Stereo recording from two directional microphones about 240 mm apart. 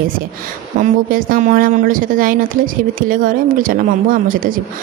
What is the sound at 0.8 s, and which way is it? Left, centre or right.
A woman's voice, right.